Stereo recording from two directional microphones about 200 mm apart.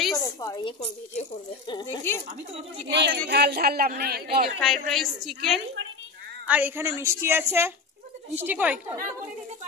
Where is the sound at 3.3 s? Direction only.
55° right (ahead or behind).